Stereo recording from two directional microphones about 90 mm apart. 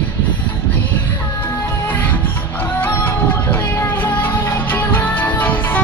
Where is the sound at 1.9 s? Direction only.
25° left (ahead or behind).